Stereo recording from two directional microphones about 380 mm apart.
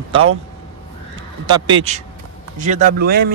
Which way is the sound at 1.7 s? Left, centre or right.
Centre.